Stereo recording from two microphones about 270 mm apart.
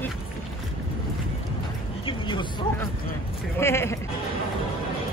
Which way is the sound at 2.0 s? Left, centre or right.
Centre.